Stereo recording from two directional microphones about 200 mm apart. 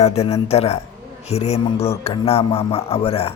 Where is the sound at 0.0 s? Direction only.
30° left (ahead or behind).